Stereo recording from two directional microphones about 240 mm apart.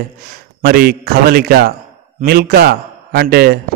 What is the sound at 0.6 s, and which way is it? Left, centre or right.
A man's voice, right.